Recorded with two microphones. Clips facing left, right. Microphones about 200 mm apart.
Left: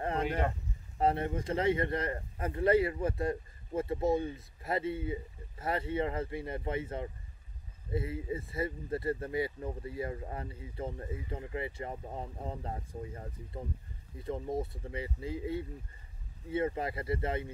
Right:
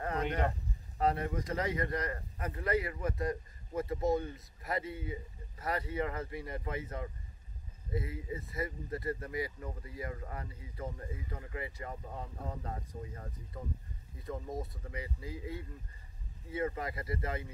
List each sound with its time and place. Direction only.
0.9 s speech: 25° left (ahead or behind)